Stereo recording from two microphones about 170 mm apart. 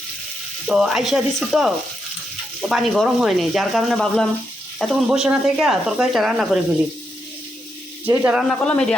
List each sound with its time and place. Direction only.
0.7 s speech: 5° right (ahead or behind)
8.0 s a man's voice: 10° right (ahead or behind)
8.5 s a man's voice: 10° left (ahead or behind)